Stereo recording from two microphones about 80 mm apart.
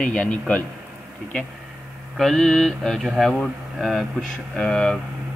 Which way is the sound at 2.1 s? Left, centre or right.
Centre.